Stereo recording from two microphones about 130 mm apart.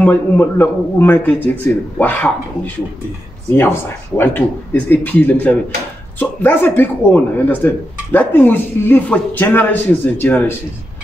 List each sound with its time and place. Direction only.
0.0 s speech: 15° left (ahead or behind)
4.2 s speech: 15° left (ahead or behind)